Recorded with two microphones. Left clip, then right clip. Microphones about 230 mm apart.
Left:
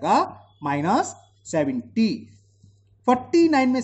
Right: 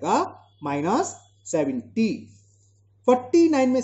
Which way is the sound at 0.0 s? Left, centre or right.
Left.